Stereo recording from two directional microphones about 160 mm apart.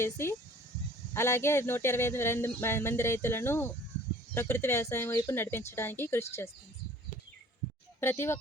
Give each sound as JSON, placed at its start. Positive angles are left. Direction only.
{"t": 0.0, "sound": "speech", "side_deg": 15}
{"t": 8.0, "sound": "speech", "side_deg": 15}